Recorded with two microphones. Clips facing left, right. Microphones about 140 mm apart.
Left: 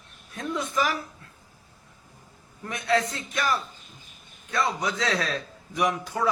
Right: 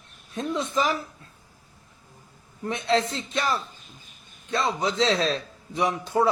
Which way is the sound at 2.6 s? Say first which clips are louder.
Right 1 dB; 25° right (ahead or behind).